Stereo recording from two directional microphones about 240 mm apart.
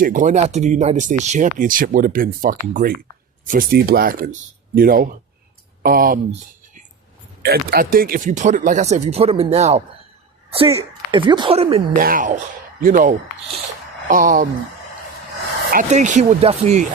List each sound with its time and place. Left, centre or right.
0.0 s speech: right
7.4 s a woman's voice: right
11.9 s speech: right
15.7 s speech: right